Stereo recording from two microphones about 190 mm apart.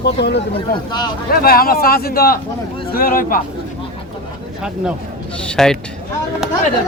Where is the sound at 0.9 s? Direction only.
25° left (ahead or behind).